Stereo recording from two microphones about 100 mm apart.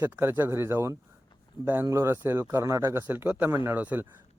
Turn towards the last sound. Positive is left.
turn(degrees=-15)  # may be behind; listen again after turning